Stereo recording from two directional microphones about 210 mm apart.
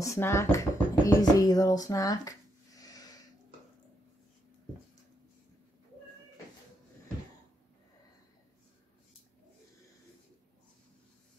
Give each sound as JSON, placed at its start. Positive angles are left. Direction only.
{"t": 0.0, "sound": "speech", "side_deg": 15}